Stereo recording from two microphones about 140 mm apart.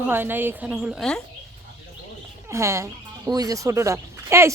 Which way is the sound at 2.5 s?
20° right (ahead or behind).